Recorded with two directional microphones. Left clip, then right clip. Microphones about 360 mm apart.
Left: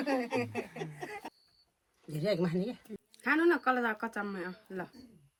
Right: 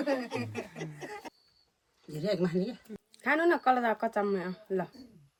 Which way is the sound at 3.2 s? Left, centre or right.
Right.